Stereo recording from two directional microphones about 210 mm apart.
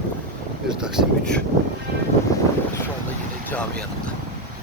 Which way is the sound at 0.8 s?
Centre (ahead or behind).